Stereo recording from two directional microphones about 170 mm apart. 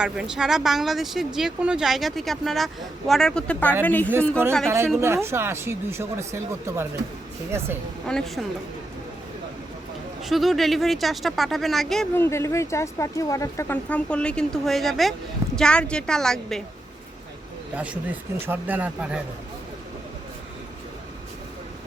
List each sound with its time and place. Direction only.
0.0 s speech: 5° right (ahead or behind)
4.9 s speech: 15° right (ahead or behind)
8.0 s speech: 5° left (ahead or behind)
10.2 s speech: centre (ahead or behind)
12.1 s speech: 15° left (ahead or behind)
17.7 s speech: 10° right (ahead or behind)